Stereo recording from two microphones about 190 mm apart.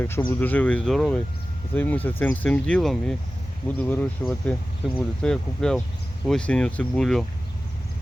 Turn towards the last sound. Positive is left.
turn(degrees=0)  # may be behind; listen again after turning